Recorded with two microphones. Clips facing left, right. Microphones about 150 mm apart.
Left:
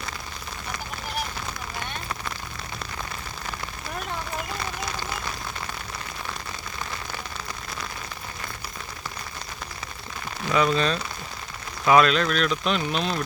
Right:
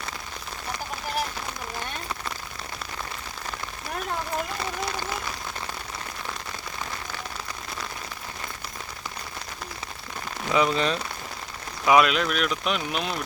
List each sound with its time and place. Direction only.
10.5 s speech: 20° right (ahead or behind)